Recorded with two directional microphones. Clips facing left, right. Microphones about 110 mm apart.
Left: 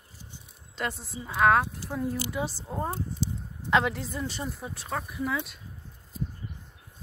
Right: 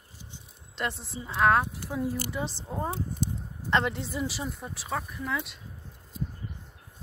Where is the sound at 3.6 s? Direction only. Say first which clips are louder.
Left 2 dB; centre (ahead or behind).